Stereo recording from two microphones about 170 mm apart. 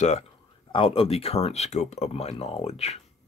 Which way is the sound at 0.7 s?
30° left (ahead or behind).